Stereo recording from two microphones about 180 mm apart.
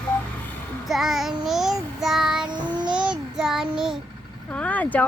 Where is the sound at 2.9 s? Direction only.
5° right (ahead or behind).